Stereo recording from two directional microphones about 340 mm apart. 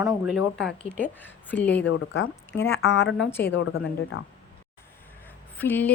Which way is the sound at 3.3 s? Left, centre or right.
Centre.